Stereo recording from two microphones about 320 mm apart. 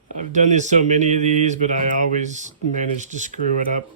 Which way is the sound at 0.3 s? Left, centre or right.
Right.